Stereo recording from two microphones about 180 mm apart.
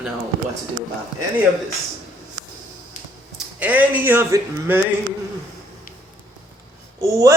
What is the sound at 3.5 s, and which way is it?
Speech, 10° right (ahead or behind).